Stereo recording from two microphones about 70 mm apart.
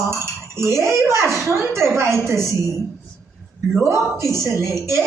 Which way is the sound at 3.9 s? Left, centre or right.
Right.